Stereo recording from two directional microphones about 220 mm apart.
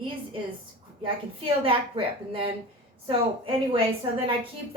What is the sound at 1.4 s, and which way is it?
A woman's voice, 25° right (ahead or behind).